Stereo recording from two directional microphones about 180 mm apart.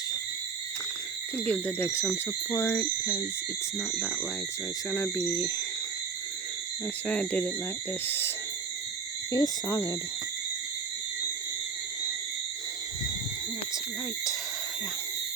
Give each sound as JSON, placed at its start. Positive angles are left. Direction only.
{"t": 1.5, "sound": "speech", "side_deg": 5}
{"t": 7.1, "sound": "speech", "side_deg": 10}
{"t": 9.3, "sound": "speech", "side_deg": 20}